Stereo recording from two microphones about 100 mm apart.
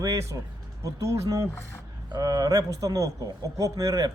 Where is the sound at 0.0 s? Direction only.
30° right (ahead or behind).